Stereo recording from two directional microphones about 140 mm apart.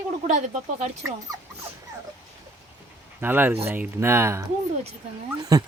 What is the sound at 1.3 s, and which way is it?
Speech, 25° right (ahead or behind).